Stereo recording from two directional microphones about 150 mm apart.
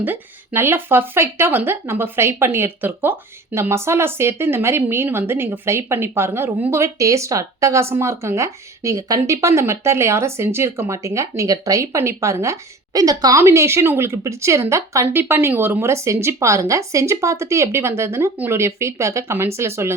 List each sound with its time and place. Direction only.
0.0 s speech: 15° right (ahead or behind)